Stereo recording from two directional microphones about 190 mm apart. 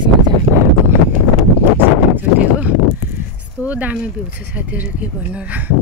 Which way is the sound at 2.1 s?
10° right (ahead or behind).